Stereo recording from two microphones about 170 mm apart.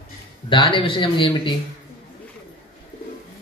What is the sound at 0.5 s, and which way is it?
A man's voice, 30° left (ahead or behind).